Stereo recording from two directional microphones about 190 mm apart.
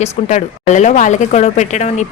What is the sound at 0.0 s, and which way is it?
A woman's voice, 40° left (ahead or behind).